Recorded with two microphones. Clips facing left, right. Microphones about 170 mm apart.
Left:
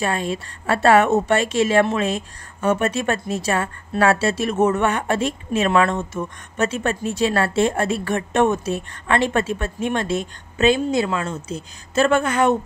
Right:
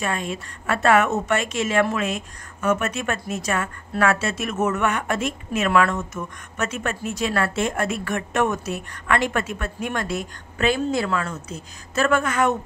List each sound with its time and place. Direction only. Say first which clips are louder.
0.0 s a woman's voice: left 4 dB; 35° left (ahead or behind)